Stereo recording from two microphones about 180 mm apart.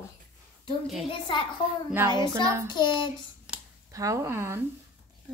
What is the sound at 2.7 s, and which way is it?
Child singing, 25° left (ahead or behind).